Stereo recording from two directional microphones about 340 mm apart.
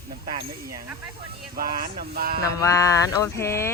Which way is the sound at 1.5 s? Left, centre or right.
Right.